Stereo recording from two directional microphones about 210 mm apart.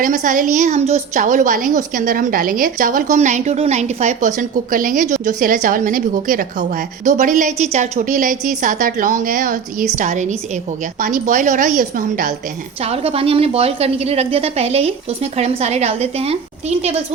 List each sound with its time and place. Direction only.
0.0 s a woman's voice: 40° right (ahead or behind)
12.8 s a woman's voice: 30° right (ahead or behind)